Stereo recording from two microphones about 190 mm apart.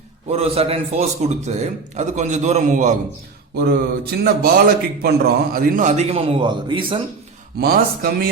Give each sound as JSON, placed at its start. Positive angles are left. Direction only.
{"t": 0.3, "sound": "a man's voice", "side_deg": -30}
{"t": 3.5, "sound": "mantra", "side_deg": -60}
{"t": 4.2, "sound": "a man's voice", "side_deg": -55}
{"t": 7.6, "sound": "speech", "side_deg": -55}